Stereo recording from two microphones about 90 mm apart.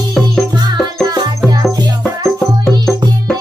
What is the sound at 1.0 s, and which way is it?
Music, 45° right (ahead or behind).